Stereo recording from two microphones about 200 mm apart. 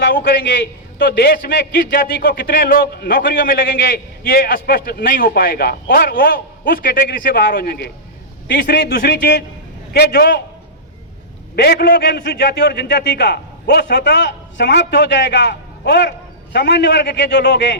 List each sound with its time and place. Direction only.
0.0 s a man's voice: 50° left (ahead or behind)
11.5 s a man's voice: 55° left (ahead or behind)